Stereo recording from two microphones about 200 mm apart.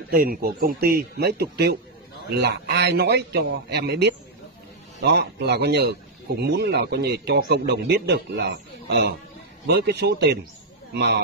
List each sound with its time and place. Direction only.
0.1 s a man's voice: 50° right (ahead or behind)